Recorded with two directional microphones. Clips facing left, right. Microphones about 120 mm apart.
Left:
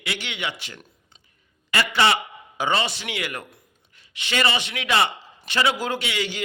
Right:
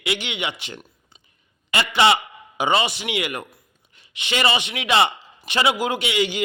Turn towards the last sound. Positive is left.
turn(degrees=-15)  # may be behind; listen again after turning